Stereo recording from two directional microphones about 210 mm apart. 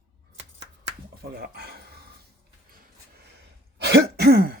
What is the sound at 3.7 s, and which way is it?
Throat clearing, 50° right (ahead or behind).